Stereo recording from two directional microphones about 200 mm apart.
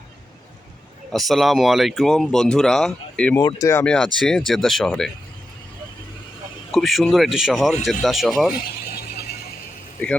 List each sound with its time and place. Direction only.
1.1 s speech: centre (ahead or behind)
6.7 s speech: centre (ahead or behind)
8.9 s a sound: 50° left (ahead or behind)